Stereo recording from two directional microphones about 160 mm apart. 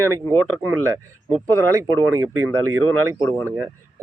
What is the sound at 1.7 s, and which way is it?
Speech, 20° right (ahead or behind).